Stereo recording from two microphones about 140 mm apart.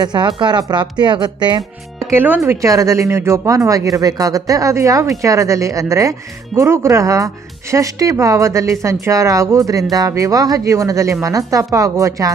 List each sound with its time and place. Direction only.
0.0 s speech: 30° right (ahead or behind)
2.0 s speech: 15° right (ahead or behind)